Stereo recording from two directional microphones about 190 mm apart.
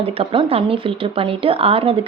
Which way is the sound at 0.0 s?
30° right (ahead or behind).